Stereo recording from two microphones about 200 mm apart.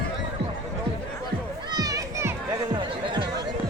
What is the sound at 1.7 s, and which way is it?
Music, 20° right (ahead or behind).